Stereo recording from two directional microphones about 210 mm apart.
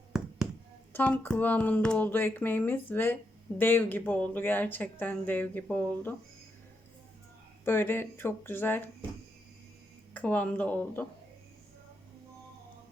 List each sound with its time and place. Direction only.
0.1 s a sound: 5° right (ahead or behind)
0.9 s speech: 5° left (ahead or behind)
7.6 s speech: 10° left (ahead or behind)
10.2 s speech: 5° left (ahead or behind)